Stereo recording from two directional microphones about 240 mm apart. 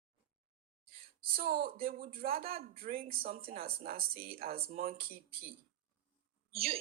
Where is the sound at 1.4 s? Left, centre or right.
Right.